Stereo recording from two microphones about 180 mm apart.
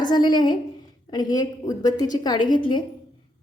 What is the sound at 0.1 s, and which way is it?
A woman's voice, 25° left (ahead or behind).